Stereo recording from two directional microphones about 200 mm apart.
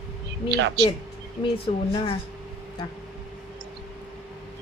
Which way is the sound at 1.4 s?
25° left (ahead or behind).